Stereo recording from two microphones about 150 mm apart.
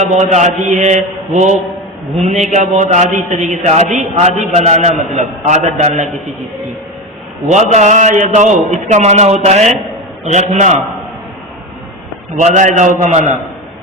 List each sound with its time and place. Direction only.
0.1 s a man's voice: 50° right (ahead or behind)
7.4 s a man's voice: 50° right (ahead or behind)
12.4 s a man's voice: 55° right (ahead or behind)